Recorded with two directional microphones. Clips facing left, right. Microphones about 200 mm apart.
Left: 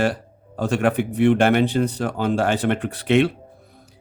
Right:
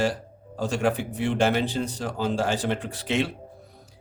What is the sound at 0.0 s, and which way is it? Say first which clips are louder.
Speech: left 3 dB; 60° left (ahead or behind).